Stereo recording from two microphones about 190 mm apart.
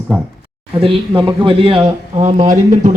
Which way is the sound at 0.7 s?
30° right (ahead or behind).